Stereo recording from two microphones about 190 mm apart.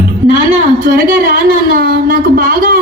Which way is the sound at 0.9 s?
45° right (ahead or behind).